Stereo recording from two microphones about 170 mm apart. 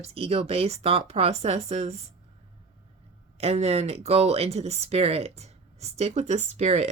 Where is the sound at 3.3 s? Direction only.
35° right (ahead or behind).